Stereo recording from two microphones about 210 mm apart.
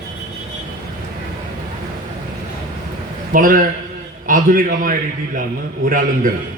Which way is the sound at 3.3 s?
40° right (ahead or behind).